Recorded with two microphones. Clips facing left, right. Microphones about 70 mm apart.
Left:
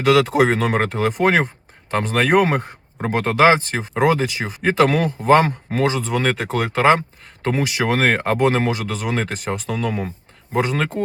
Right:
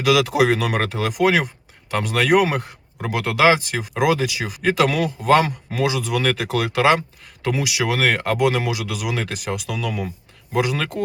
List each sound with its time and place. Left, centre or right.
0.5 s speech: left
6.3 s speech: centre
7.4 s speech: left